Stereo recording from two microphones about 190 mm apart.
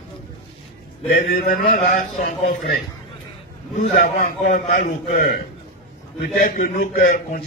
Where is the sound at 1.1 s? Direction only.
50° left (ahead or behind).